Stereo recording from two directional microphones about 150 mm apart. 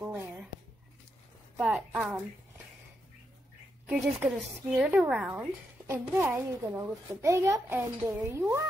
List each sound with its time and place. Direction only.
0.0 s a sound: 10° right (ahead or behind)
1.6 s a child's voice: 5° right (ahead or behind)
3.8 s a child's voice: 5° right (ahead or behind)